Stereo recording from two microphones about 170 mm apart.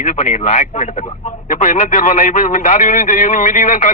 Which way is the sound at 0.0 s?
45° left (ahead or behind).